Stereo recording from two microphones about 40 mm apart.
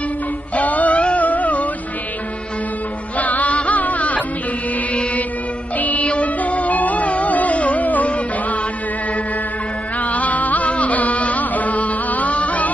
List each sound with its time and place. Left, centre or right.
0.6 s music: left
3.2 s music: left
5.8 s music: left
10.1 s music: left